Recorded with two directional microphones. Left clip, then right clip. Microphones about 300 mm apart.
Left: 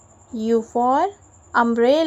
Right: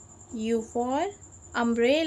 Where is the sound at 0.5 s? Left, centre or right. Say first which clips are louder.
Left 10 dB; centre.